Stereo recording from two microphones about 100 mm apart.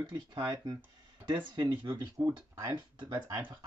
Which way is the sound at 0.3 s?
45° right (ahead or behind).